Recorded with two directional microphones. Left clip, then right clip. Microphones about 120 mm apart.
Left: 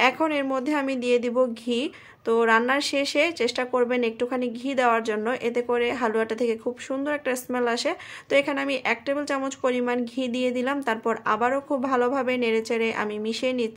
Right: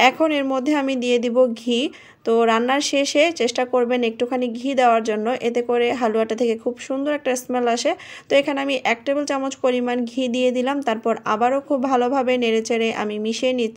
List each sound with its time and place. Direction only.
0.0 s speech: 30° right (ahead or behind)